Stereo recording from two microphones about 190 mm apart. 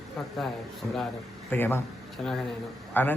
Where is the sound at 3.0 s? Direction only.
10° left (ahead or behind).